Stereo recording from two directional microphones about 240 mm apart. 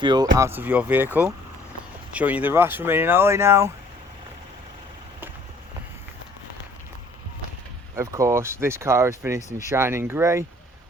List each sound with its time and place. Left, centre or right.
0.0 s speech: centre
7.9 s speech: centre